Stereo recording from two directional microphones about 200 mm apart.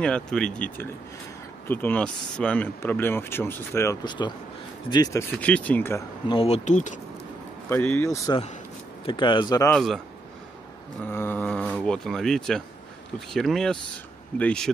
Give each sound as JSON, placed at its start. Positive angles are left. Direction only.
{"t": 0.0, "sound": "speech", "side_deg": 5}
{"t": 5.3, "sound": "speech", "side_deg": 5}
{"t": 6.2, "sound": "speech", "side_deg": 25}
{"t": 7.7, "sound": "speech", "side_deg": 10}
{"t": 9.7, "sound": "speech", "side_deg": 0}
{"t": 11.1, "sound": "speech", "side_deg": 10}